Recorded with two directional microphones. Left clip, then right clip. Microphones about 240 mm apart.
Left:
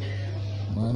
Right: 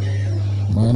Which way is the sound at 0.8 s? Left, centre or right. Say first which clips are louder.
Right 9 dB; right.